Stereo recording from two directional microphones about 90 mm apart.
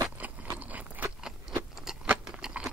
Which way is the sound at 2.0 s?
10° right (ahead or behind).